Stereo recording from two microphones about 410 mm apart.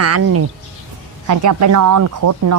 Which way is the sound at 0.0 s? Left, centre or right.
Right.